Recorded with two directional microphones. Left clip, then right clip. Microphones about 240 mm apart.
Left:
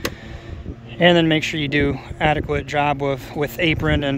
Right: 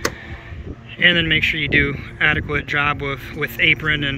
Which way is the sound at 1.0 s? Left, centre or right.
Centre.